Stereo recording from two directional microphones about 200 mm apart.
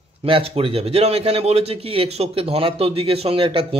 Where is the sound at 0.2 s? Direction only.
30° right (ahead or behind).